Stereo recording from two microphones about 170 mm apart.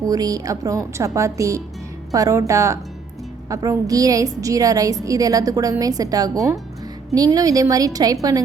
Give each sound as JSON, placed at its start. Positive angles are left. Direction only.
{"t": 0.0, "sound": "a woman's voice", "side_deg": -20}